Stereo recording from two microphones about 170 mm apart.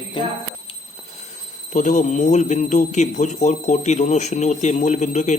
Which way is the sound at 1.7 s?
45° left (ahead or behind).